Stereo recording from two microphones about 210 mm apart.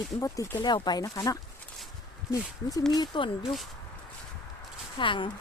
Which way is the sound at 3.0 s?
25° left (ahead or behind).